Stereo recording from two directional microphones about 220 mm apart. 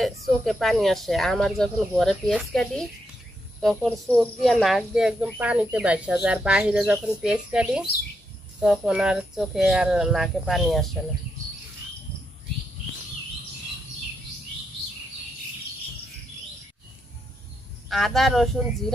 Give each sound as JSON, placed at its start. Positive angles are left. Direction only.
{"t": 0.0, "sound": "speech", "side_deg": 0}
{"t": 17.8, "sound": "speech", "side_deg": 0}